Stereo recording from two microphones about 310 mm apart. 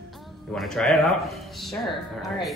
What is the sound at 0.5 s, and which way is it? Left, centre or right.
A woman's voice, centre.